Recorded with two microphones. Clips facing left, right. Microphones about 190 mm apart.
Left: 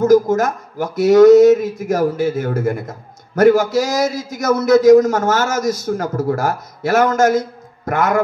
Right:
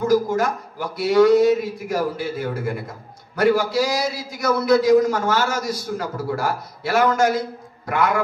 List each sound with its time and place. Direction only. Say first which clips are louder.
0.0 s speech: left 6 dB; 45° left (ahead or behind)